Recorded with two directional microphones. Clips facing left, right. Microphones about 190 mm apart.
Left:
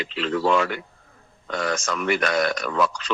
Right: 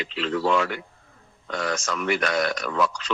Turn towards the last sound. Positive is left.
turn(degrees=50)  # may be behind; listen again after turning